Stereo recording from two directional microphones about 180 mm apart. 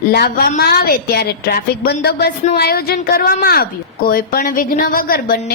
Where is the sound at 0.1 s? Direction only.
60° left (ahead or behind).